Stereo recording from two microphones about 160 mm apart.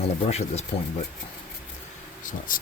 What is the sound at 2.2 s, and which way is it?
Speech, 55° left (ahead or behind).